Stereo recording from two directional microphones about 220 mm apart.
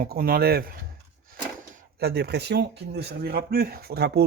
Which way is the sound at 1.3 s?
40° right (ahead or behind).